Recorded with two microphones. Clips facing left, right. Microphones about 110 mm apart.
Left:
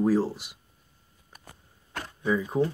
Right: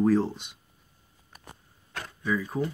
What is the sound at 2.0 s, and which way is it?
Speech, 25° left (ahead or behind).